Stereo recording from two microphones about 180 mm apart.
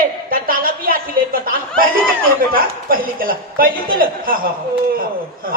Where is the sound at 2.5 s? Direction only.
55° right (ahead or behind).